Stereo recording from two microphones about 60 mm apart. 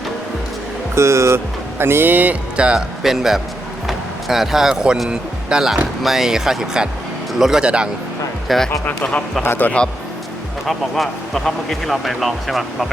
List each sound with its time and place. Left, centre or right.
0.9 s speech: right
1.8 s speech: right
2.6 s speech: centre
3.0 s a man's voice: centre
3.8 s music: centre
5.0 s speech: centre
8.4 s a man's voice: centre
9.6 s speech: left
10.7 s a man's voice: centre